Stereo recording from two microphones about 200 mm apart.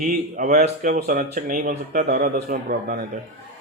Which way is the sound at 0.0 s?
40° right (ahead or behind).